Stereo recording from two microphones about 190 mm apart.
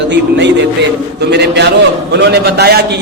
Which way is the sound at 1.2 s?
60° right (ahead or behind).